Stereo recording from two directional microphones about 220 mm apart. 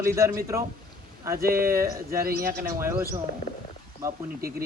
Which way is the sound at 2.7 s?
10° right (ahead or behind).